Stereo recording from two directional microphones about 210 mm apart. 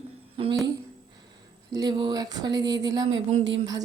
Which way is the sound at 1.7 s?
20° right (ahead or behind).